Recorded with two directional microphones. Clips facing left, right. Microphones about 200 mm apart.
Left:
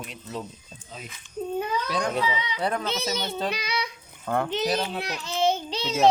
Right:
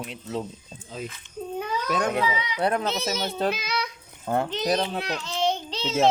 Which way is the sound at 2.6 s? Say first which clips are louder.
Right 5 dB; 60° right (ahead or behind).